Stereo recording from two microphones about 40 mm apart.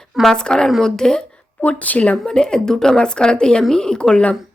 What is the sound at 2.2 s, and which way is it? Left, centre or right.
A woman's voice, centre.